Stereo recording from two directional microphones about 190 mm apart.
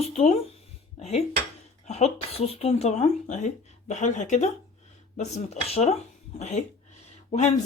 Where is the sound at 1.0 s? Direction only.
35° left (ahead or behind).